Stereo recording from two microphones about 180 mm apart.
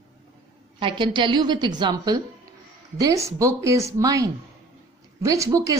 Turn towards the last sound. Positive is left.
turn(degrees=-20)  # may be behind; listen again after turning